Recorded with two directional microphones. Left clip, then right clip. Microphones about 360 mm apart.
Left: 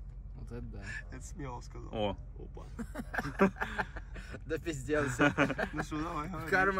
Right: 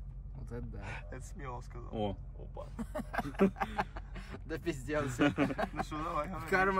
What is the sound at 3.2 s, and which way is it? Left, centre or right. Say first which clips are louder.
Speech: left 3 dB; centre.